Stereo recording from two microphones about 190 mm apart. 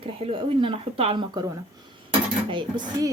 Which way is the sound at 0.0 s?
30° right (ahead or behind).